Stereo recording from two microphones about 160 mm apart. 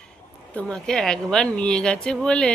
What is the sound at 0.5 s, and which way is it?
A woman's voice, 5° left (ahead or behind).